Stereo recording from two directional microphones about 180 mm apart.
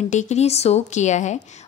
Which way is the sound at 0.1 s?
40° left (ahead or behind).